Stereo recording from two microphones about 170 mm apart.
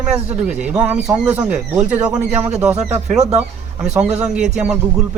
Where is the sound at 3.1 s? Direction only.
45° right (ahead or behind).